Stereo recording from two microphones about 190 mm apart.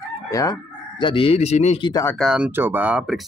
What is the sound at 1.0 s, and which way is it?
Speech, 30° left (ahead or behind).